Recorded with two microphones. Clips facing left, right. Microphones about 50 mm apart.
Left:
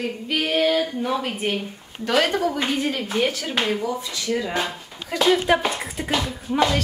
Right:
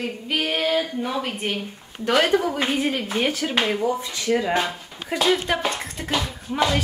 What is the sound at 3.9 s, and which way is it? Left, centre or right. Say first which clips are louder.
Speech: right 3 dB; right.